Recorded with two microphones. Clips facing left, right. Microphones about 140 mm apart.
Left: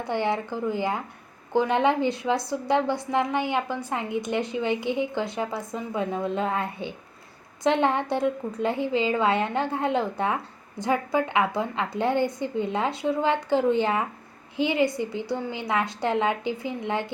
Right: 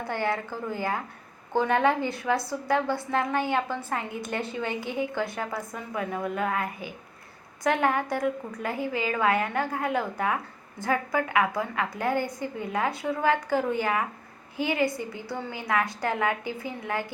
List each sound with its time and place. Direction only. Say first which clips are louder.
0.0 s a woman's voice: left 3 dB; 20° left (ahead or behind)